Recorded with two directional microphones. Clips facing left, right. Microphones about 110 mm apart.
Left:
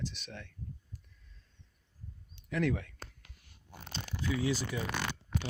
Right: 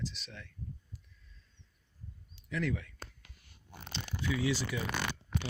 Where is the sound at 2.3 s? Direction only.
55° left (ahead or behind).